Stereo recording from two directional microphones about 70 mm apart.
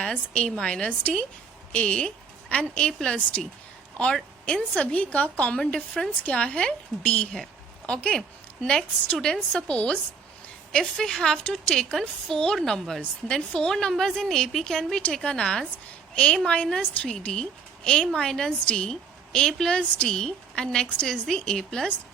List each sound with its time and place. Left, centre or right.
0.0 s a woman's voice: centre